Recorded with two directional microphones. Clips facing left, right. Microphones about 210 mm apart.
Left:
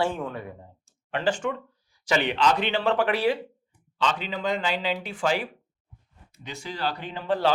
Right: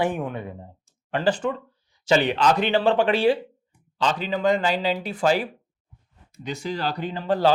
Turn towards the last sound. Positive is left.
turn(degrees=-40)  # may be behind; listen again after turning